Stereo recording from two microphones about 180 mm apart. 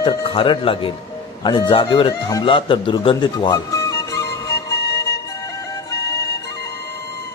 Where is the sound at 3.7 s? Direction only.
15° left (ahead or behind).